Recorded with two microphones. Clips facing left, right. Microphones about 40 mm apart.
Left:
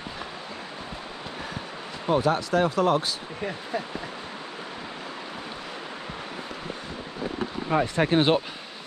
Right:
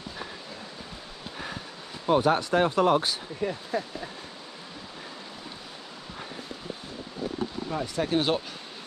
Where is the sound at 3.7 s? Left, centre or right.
Centre.